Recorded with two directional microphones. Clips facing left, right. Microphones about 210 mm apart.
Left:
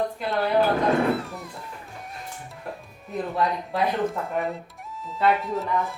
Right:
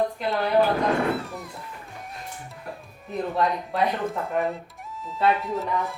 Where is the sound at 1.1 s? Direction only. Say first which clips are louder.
Left 1 dB; centre (ahead or behind).